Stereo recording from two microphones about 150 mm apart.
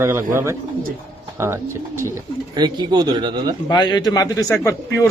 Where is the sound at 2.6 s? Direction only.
30° right (ahead or behind).